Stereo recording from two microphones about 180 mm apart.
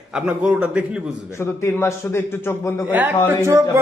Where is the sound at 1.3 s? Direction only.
15° left (ahead or behind).